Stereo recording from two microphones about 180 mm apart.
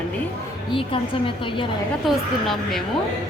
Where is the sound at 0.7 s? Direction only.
30° left (ahead or behind).